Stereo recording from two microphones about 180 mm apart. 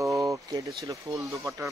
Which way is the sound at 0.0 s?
15° right (ahead or behind).